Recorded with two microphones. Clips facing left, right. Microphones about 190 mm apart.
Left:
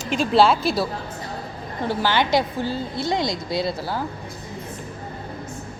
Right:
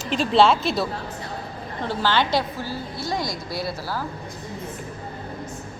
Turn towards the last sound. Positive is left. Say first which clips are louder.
# left 4 dB
turn(degrees=20)  # may be behind; listen again after turning